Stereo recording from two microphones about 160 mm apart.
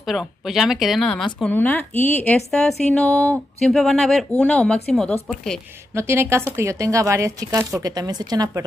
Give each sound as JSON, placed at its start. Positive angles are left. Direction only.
{"t": 0.0, "sound": "speech", "side_deg": 0}
{"t": 5.9, "sound": "speech", "side_deg": -15}